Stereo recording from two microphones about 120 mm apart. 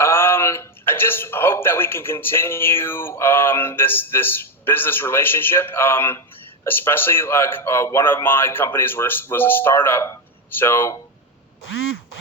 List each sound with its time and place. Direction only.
0.0 s a man's voice: 20° left (ahead or behind)